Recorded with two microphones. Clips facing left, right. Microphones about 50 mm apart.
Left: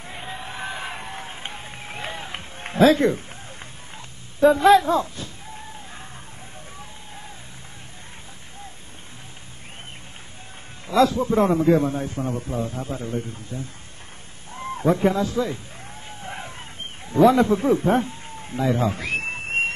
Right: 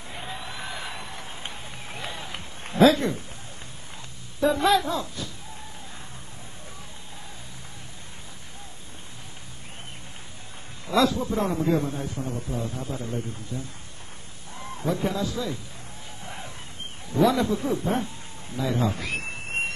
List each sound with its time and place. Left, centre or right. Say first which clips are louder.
0.1 s music: left 2 dB; centre
0.5 s a sound: left 4 dB; left
4.6 s a man's voice: left 7 dB; left
10.9 s a man's voice: left 4 dB; left
16.2 s a sound: left 5 dB; left
17.1 s speech: left 6 dB; left